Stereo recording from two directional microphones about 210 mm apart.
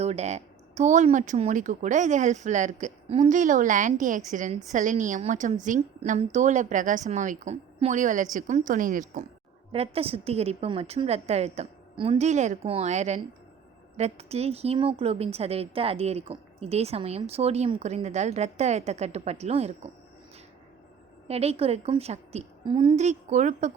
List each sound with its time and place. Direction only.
0.0 s a woman's voice: 30° right (ahead or behind)
21.2 s a woman's voice: 30° right (ahead or behind)